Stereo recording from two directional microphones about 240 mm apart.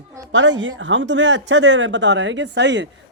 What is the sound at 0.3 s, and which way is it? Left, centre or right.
Speech, right.